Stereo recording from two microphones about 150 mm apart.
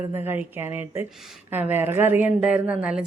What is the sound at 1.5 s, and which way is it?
Speech, 15° right (ahead or behind).